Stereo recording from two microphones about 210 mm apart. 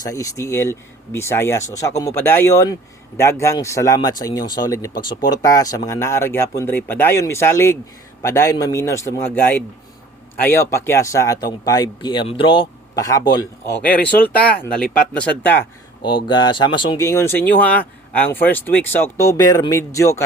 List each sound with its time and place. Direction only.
0.0 s speech: 15° left (ahead or behind)
14.3 s speech: 5° left (ahead or behind)
16.3 s speech: 20° left (ahead or behind)